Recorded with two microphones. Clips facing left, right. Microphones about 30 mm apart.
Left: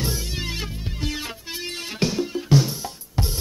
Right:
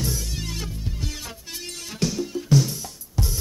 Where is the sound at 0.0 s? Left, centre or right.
Left.